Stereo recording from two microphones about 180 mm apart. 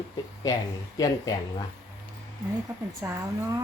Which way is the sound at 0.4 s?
20° left (ahead or behind).